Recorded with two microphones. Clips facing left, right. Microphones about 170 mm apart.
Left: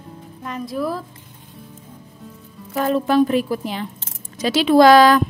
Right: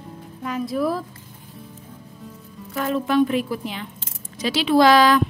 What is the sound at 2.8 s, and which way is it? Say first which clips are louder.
A woman's voice: left 3 dB; 40° left (ahead or behind).